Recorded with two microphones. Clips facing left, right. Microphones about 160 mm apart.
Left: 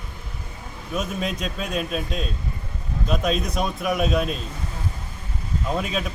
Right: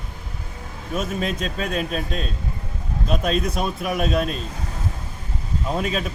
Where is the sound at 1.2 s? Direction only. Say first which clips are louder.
Right 2 dB; 5° left (ahead or behind).